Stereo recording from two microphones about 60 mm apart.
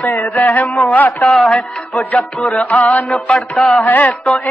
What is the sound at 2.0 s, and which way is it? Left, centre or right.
Music, left.